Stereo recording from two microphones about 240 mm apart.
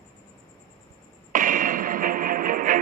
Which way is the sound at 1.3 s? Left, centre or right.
Right.